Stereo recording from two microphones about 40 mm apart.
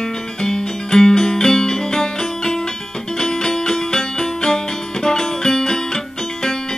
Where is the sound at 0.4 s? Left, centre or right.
Centre.